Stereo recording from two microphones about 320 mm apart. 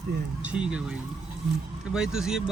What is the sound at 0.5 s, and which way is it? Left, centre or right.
Speech, centre.